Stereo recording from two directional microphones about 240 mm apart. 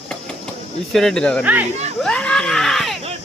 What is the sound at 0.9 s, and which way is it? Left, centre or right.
Speech, centre.